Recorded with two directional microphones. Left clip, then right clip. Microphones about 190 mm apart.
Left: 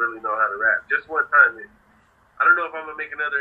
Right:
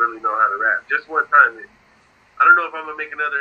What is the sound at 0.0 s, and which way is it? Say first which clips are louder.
Radio: right 4 dB; 25° right (ahead or behind).